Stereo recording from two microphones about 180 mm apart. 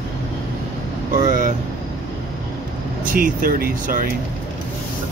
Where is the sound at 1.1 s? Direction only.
50° right (ahead or behind).